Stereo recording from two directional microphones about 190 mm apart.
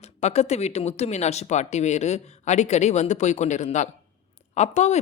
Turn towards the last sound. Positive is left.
turn(degrees=35)  # may be behind; listen again after turning